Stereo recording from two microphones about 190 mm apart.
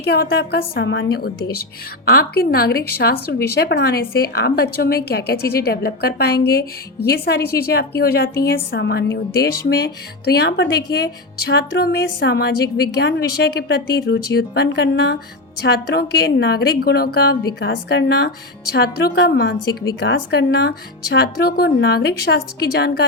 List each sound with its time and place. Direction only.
0.0 s a woman's voice: 55° left (ahead or behind)